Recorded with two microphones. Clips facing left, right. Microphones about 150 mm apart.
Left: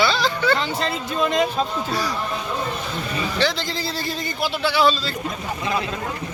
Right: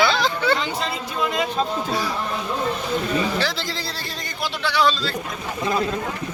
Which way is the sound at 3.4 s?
5° right (ahead or behind).